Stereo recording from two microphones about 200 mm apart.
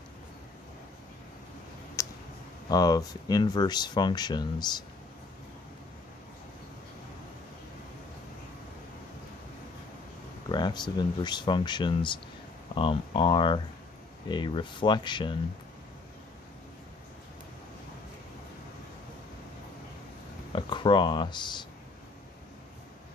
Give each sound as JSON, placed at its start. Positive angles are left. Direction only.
{"t": 2.0, "sound": "a sound", "side_deg": 15}
{"t": 2.7, "sound": "speech", "side_deg": 20}
{"t": 10.5, "sound": "speech", "side_deg": 20}
{"t": 20.5, "sound": "speech", "side_deg": 25}